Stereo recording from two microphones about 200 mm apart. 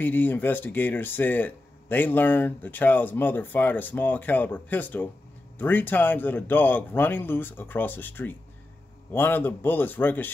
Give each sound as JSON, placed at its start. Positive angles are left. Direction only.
{"t": 0.0, "sound": "speech", "side_deg": 10}